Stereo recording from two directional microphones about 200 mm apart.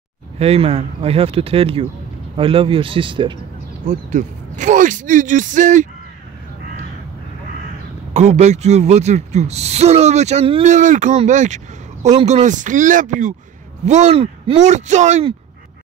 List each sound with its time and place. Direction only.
0.4 s speech: 30° right (ahead or behind)
3.8 s speech: 40° right (ahead or behind)
8.1 s speech: 35° right (ahead or behind)